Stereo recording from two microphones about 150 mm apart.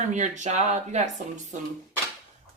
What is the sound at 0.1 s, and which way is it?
Speech, 50° right (ahead or behind).